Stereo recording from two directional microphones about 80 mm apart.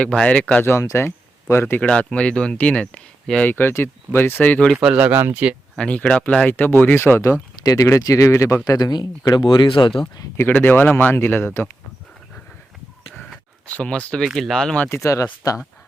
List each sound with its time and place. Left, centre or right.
0.0 s speech: centre
0.6 s speech: left
1.8 s speech: centre
3.5 s speech: left
4.7 s speech: centre
4.9 s speech: right
5.7 s speech: centre
7.6 s speech: left
8.6 s speech: left
10.5 s speech: left
13.7 s speech: centre
14.3 s speech: centre
14.8 s speech: left
15.1 s speech: left